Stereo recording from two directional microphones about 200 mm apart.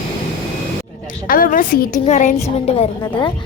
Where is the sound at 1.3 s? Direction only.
45° left (ahead or behind).